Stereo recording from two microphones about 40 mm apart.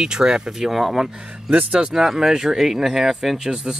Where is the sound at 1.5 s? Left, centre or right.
Right.